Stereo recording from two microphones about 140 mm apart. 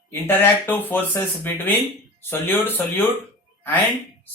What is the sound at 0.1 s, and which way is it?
Speech, 15° left (ahead or behind).